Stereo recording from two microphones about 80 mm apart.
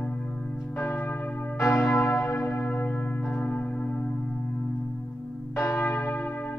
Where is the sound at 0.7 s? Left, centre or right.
Left.